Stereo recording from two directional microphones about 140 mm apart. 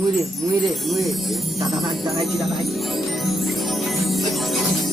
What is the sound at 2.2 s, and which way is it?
Speech, centre (ahead or behind).